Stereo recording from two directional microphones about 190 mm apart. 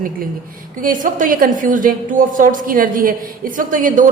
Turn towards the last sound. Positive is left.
turn(degrees=-45)  # may be behind; listen again after turning